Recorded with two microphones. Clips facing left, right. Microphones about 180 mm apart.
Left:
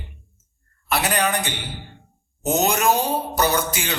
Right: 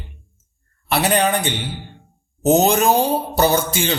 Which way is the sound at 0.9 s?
30° right (ahead or behind).